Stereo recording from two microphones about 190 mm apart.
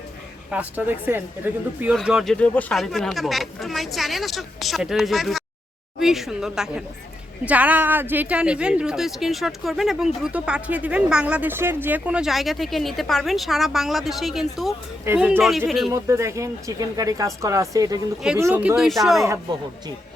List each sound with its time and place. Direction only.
0.5 s speech: 10° right (ahead or behind)
15.4 s speech: centre (ahead or behind)
15.9 s speech: 15° right (ahead or behind); by 19.3 s centre (ahead or behind)